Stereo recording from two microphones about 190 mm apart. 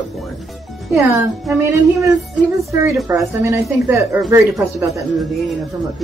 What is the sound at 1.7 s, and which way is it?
A woman's voice, 15° right (ahead or behind).